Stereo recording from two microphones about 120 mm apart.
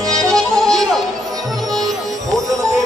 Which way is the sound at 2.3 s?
Centre (ahead or behind).